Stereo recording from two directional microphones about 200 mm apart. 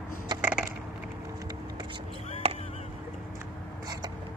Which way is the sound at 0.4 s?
5° right (ahead or behind).